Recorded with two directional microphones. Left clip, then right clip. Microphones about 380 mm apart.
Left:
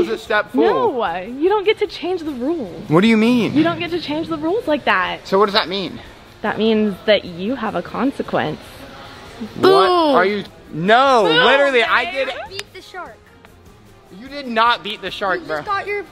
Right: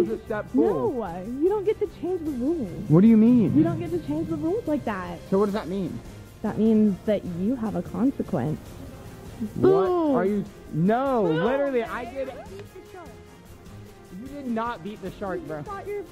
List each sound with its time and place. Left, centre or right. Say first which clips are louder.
0.0 s speech: left 9 dB; centre
0.7 s speech: left 9 dB; centre
1.0 s speech: left 7 dB; centre
9.6 s speech: left 8 dB; centre
14.5 s speech: left 14 dB; centre